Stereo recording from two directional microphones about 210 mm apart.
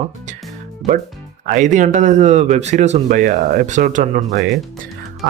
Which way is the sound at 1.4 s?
35° right (ahead or behind).